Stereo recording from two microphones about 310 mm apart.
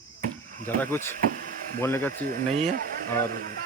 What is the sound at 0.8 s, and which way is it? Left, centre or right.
Speech, centre.